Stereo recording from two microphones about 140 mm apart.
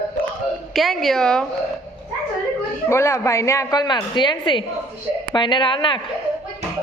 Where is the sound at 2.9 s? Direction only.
20° left (ahead or behind).